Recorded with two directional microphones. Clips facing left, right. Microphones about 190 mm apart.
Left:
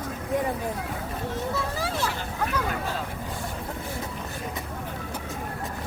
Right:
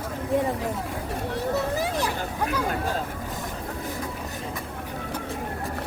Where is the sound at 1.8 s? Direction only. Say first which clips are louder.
Right 2 dB; 15° right (ahead or behind).